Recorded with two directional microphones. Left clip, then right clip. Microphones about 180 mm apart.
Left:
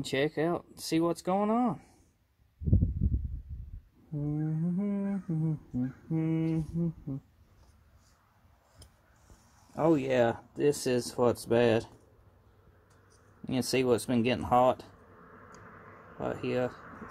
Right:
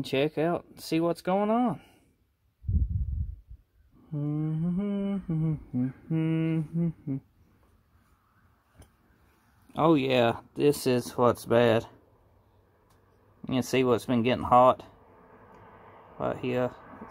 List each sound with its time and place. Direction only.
0.0 s mantra: 15° right (ahead or behind)
4.1 s mantra: 15° right (ahead or behind)
9.8 s speech: 25° right (ahead or behind)
10.8 s mantra: 15° right (ahead or behind)
13.5 s mantra: 10° right (ahead or behind)
16.2 s mantra: 10° right (ahead or behind)